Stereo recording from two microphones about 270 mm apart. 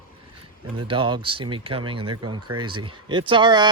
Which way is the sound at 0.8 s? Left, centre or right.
Centre.